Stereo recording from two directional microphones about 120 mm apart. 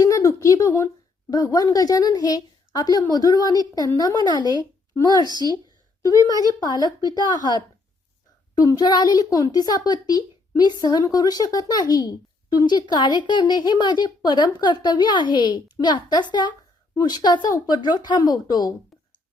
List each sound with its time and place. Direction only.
0.0 s a sound: 25° left (ahead or behind)
1.3 s a woman's voice: 30° left (ahead or behind)
8.5 s a woman's voice: 35° left (ahead or behind)